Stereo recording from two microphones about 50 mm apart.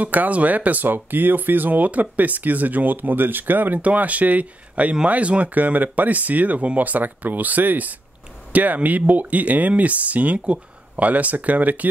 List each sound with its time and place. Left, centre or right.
0.0 s speech: right